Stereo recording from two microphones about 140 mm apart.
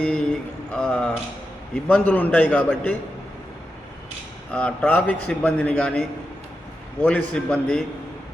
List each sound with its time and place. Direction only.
0.0 s a sound: 5° left (ahead or behind)
1.7 s a man's voice: 10° left (ahead or behind)
4.5 s a man's voice: 10° left (ahead or behind)